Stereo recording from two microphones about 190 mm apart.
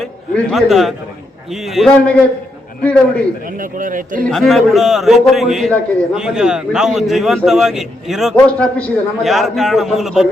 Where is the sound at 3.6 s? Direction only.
45° right (ahead or behind).